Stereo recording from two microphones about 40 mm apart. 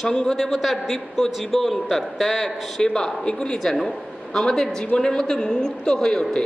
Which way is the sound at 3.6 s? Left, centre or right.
Centre.